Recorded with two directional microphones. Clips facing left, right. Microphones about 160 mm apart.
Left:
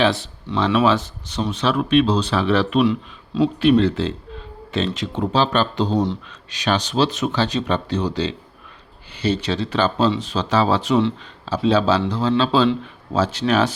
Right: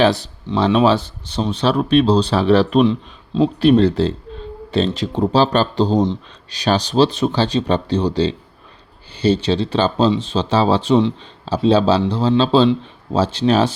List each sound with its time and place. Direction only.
0.0 s speech: 40° right (ahead or behind)
0.4 s speech: 25° right (ahead or behind)
2.8 s speech: 25° right (ahead or behind)